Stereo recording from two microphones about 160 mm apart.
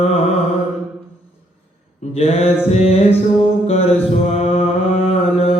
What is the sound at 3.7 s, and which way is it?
Mantra, 40° left (ahead or behind).